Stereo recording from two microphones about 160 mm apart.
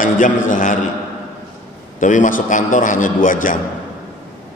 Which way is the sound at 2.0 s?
55° left (ahead or behind).